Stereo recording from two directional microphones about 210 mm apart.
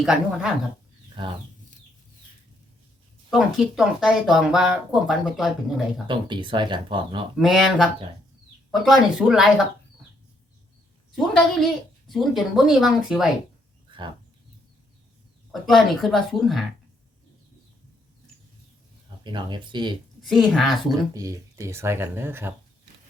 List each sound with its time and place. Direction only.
0.0 s speech: centre (ahead or behind)
3.2 s speech: centre (ahead or behind)
6.1 s speech: 20° right (ahead or behind)
7.3 s speech: centre (ahead or behind)
11.1 s speech: centre (ahead or behind)
13.9 s bird: 20° right (ahead or behind)
15.6 s speech: centre (ahead or behind)
19.2 s speech: 20° right (ahead or behind)
20.2 s speech: centre (ahead or behind)
21.1 s speech: 15° right (ahead or behind)